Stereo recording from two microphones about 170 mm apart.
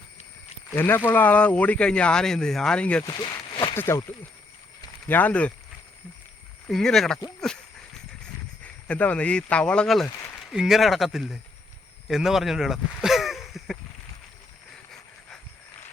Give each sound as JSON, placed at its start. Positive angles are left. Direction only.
{"t": 0.8, "sound": "speech", "side_deg": 10}
{"t": 3.0, "sound": "a sound", "side_deg": 25}
{"t": 3.8, "sound": "speech", "side_deg": 15}
{"t": 5.0, "sound": "speech", "side_deg": 10}
{"t": 6.7, "sound": "speech", "side_deg": 0}
{"t": 8.6, "sound": "speech", "side_deg": 10}
{"t": 12.0, "sound": "a sound", "side_deg": 0}